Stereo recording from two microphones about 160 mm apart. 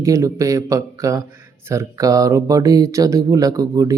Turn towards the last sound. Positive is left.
turn(degrees=-20)  # may be behind; listen again after turning